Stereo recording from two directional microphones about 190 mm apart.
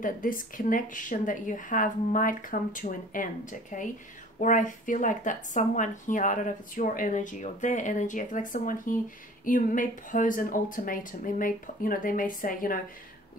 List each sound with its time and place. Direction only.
0.0 s speech: 45° left (ahead or behind)